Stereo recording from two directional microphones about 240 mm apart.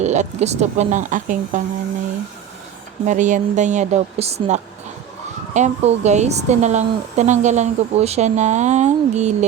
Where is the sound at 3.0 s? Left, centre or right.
Right.